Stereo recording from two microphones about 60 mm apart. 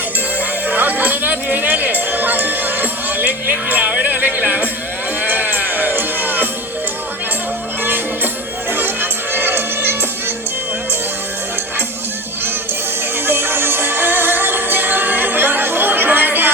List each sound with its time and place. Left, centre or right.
0.7 s music: right
7.9 s music: right
13.2 s music: right